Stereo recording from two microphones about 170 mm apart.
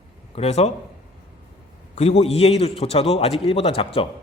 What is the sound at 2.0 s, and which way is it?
A man's voice, 40° left (ahead or behind).